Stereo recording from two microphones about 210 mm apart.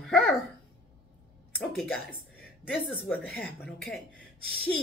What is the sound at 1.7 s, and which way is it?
Speech, centre (ahead or behind).